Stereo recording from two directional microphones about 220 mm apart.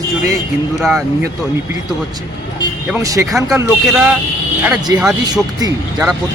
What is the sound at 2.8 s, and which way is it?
Speech, 10° right (ahead or behind).